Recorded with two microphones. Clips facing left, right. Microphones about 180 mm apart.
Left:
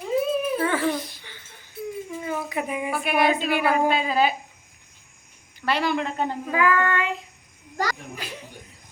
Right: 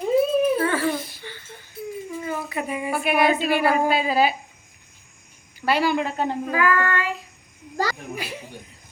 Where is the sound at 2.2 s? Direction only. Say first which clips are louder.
Even; 15° left (ahead or behind).